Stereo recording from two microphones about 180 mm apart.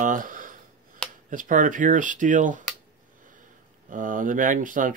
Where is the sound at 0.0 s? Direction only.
50° right (ahead or behind).